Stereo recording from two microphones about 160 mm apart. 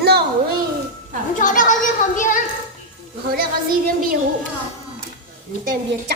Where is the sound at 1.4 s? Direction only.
55° left (ahead or behind).